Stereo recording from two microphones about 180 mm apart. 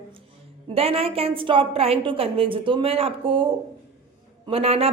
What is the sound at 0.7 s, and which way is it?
A man's voice, 30° right (ahead or behind).